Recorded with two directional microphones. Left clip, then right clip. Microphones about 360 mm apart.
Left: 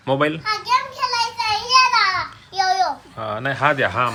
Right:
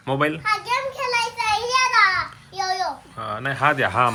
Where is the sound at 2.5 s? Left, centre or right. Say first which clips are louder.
Left 8 dB; centre.